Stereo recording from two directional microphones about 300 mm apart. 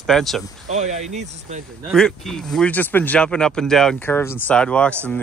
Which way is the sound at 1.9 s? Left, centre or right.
Centre.